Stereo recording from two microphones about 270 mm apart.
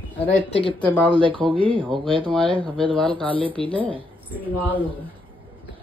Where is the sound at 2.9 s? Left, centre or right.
Centre.